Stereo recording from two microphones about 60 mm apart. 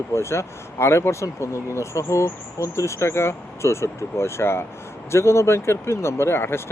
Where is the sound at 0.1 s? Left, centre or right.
Left.